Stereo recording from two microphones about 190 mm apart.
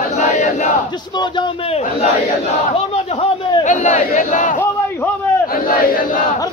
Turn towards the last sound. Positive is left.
turn(degrees=40)  # may be behind; listen again after turning